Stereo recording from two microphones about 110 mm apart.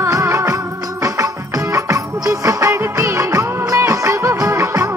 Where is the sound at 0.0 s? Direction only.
25° right (ahead or behind).